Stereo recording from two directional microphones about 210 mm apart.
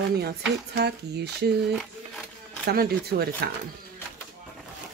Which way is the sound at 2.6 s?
50° right (ahead or behind).